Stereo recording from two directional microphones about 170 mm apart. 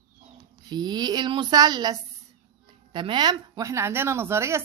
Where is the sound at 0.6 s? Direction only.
25° right (ahead or behind).